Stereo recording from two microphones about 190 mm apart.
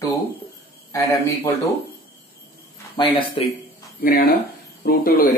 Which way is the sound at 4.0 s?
50° left (ahead or behind).